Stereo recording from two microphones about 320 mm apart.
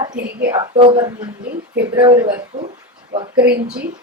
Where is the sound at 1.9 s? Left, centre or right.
Centre.